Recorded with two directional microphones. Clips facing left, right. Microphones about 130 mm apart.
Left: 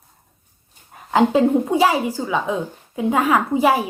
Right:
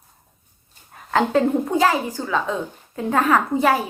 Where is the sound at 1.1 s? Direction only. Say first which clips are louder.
Left 3 dB; 10° left (ahead or behind).